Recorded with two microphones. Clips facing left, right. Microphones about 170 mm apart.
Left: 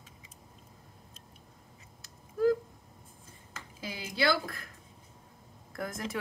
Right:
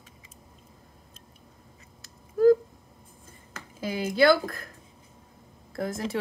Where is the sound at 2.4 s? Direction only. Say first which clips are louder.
Right 8 dB; 40° right (ahead or behind).